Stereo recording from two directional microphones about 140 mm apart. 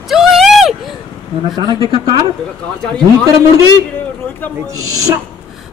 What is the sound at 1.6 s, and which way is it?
Speech, 35° right (ahead or behind).